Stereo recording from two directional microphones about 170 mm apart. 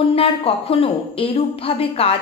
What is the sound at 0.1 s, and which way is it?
A woman's voice, 35° left (ahead or behind).